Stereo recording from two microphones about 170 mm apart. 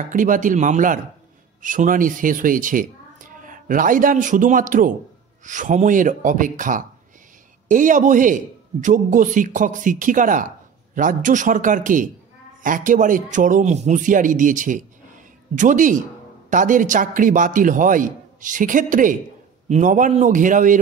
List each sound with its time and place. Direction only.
0.1 s a man's voice: 50° right (ahead or behind)